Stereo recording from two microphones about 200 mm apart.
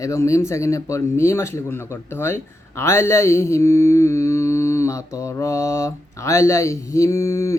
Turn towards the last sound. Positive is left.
turn(degrees=15)  # may be behind; listen again after turning